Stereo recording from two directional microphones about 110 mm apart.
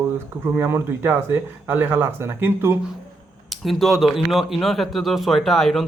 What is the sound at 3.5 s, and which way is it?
A man's voice, centre (ahead or behind).